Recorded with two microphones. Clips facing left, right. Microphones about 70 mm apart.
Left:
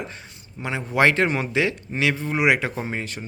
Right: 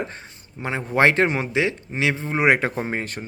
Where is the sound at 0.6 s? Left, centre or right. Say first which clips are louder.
Right 1 dB; right.